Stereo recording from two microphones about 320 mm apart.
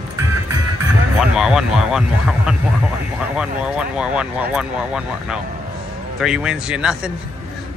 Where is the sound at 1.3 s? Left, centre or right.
Centre.